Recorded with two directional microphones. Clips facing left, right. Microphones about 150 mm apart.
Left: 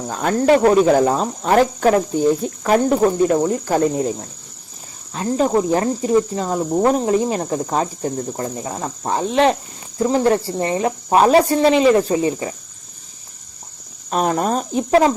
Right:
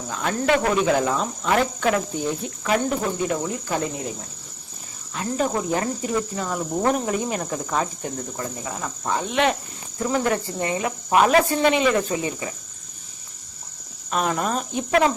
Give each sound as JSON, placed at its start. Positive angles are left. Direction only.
{"t": 0.1, "sound": "speech", "side_deg": 45}
{"t": 14.1, "sound": "speech", "side_deg": 40}